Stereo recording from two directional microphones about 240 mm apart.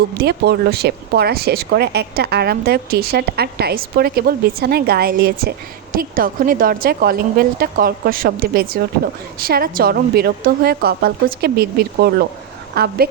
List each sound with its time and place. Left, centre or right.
0.2 s speech: right